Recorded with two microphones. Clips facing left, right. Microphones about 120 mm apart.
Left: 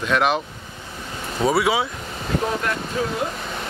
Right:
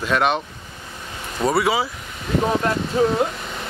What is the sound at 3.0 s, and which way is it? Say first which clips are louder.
Speech: right 8 dB; 30° right (ahead or behind).